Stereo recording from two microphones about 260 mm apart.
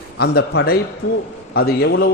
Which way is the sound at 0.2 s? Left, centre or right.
Left.